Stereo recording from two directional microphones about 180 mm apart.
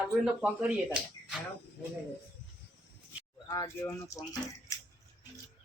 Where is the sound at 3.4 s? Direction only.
20° left (ahead or behind).